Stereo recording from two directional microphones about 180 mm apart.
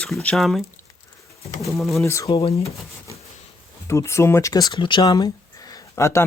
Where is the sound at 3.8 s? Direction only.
15° left (ahead or behind).